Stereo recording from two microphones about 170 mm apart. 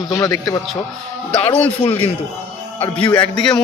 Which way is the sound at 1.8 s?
35° left (ahead or behind).